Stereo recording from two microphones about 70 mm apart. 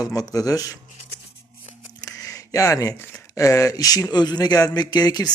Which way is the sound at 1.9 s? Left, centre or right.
Left.